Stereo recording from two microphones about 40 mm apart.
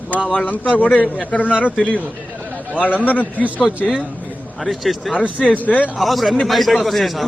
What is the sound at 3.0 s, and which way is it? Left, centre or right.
Speech, left.